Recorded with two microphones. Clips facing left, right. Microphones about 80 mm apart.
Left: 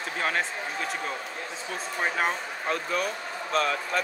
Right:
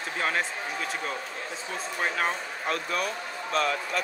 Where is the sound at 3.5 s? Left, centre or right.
Left.